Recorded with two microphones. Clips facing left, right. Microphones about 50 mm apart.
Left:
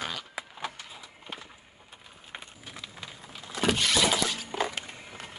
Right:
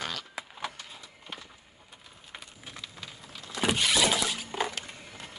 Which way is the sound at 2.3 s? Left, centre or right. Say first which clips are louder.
Left 3 dB; left.